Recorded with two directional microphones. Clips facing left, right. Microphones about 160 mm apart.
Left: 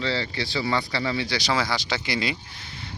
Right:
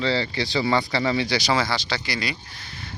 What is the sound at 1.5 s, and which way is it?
Speech, 10° left (ahead or behind).